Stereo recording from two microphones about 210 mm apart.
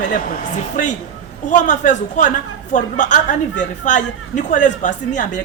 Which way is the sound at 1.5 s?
35° left (ahead or behind).